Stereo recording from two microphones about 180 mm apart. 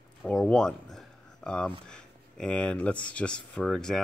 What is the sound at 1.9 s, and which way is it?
Speech, 5° left (ahead or behind).